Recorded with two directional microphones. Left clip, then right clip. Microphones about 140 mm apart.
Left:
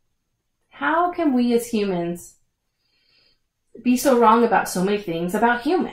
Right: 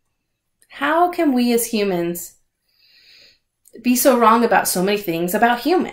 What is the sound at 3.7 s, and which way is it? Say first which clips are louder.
A woman's voice: right 2 dB; 20° right (ahead or behind).